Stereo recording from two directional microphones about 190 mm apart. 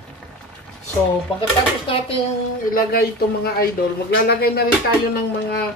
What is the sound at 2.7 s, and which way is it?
Speech, 50° left (ahead or behind).